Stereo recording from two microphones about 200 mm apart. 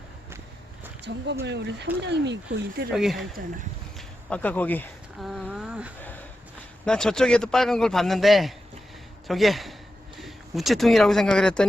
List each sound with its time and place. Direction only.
1.0 s speech: 60° right (ahead or behind)
2.9 s a man's voice: centre (ahead or behind)
3.9 s a sound: 5° left (ahead or behind)
5.3 s a man's voice: centre (ahead or behind)